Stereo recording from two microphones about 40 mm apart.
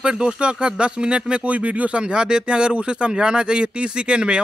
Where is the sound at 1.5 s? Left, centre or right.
Right.